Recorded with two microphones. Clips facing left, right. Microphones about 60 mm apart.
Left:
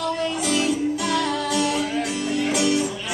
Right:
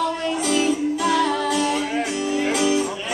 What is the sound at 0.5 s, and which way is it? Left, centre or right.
Music, centre.